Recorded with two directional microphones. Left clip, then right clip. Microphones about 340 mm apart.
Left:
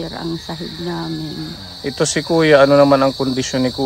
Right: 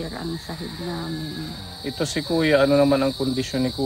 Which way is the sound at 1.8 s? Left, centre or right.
Left.